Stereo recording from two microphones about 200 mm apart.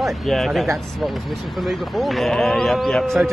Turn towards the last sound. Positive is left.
turn(degrees=0)  # may be behind; listen again after turning